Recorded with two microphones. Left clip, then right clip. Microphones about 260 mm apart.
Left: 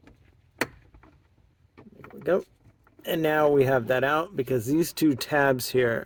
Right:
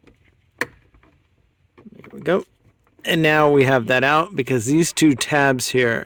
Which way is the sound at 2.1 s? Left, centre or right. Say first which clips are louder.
Right 5 dB; right.